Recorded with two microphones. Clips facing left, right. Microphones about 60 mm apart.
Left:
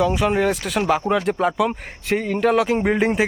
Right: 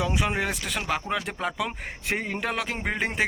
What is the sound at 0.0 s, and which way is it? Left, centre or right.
Speech, centre.